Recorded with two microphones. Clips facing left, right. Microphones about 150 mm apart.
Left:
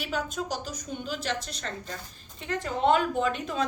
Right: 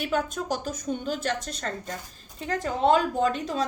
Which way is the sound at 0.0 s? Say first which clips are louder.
Right 4 dB; 50° right (ahead or behind).